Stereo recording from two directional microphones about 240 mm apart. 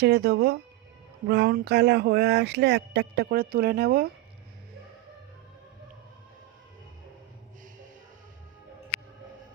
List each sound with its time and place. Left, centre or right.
0.0 s speech: right